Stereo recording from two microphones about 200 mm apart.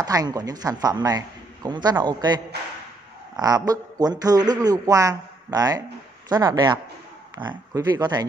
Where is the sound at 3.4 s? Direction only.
20° right (ahead or behind).